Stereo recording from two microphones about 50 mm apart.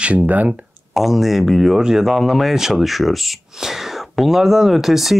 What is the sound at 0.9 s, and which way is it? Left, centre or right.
Speech, centre.